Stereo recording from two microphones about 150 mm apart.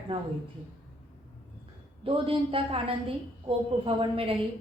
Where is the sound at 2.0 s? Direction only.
35° right (ahead or behind).